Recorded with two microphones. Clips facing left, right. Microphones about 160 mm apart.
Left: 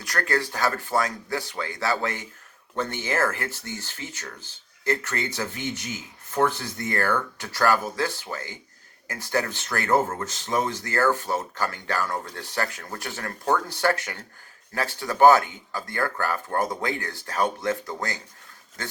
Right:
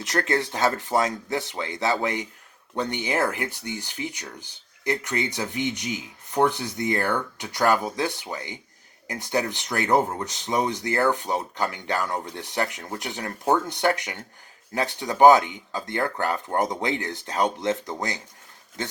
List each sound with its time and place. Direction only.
0.0 s speech: 20° right (ahead or behind)